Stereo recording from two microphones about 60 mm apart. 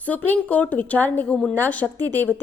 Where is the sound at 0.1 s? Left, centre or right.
Left.